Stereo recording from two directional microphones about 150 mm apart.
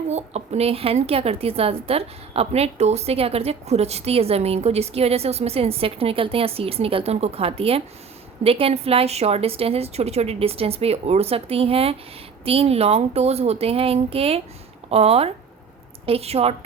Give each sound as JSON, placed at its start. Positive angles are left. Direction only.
{"t": 0.1, "sound": "a woman's voice", "side_deg": -45}